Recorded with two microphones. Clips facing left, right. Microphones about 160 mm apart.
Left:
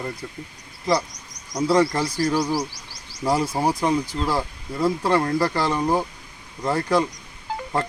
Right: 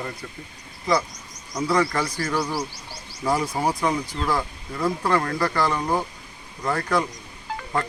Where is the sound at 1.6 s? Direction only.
30° left (ahead or behind).